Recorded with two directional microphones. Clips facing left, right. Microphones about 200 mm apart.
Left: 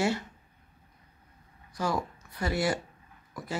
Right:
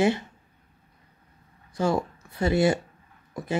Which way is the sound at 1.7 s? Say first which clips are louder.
Right 6 dB; 25° right (ahead or behind).